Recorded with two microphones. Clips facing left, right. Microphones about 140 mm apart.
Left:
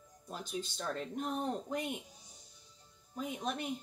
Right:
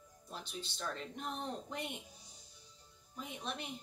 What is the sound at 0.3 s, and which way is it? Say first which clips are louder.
Speech: left 6 dB; 45° left (ahead or behind).